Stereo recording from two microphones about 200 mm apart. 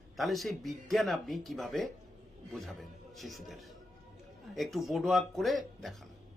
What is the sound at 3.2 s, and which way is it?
A woman's voice, centre (ahead or behind).